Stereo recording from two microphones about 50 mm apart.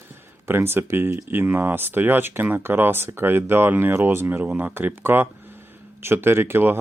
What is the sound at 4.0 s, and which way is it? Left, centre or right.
Speech, right.